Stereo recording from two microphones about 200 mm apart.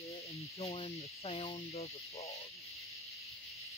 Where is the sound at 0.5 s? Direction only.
30° left (ahead or behind).